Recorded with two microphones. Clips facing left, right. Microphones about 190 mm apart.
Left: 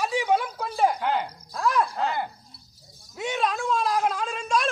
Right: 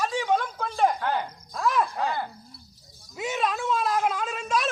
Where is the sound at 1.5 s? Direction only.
Centre (ahead or behind).